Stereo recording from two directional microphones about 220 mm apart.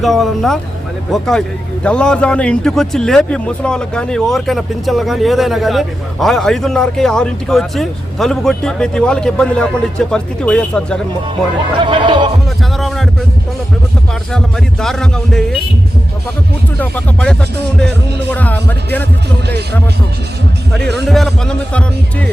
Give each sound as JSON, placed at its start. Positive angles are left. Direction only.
{"t": 0.0, "sound": "a man's voice", "side_deg": 0}
{"t": 11.8, "sound": "music", "side_deg": -20}
{"t": 12.7, "sound": "a sound", "side_deg": 0}
{"t": 14.3, "sound": "a man's voice", "side_deg": 0}
{"t": 16.7, "sound": "speech", "side_deg": 5}
{"t": 21.1, "sound": "a man's voice", "side_deg": 0}